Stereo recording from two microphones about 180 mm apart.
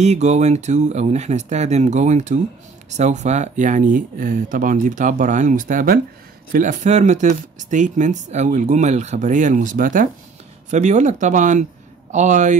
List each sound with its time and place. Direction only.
0.0 s speech: 40° right (ahead or behind)